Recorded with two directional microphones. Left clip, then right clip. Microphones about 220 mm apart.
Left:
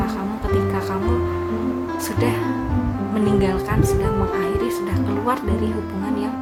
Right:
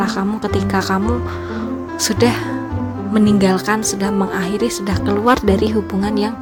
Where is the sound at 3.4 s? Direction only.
35° right (ahead or behind).